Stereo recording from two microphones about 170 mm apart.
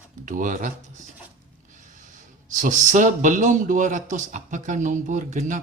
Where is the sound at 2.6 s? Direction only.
45° right (ahead or behind).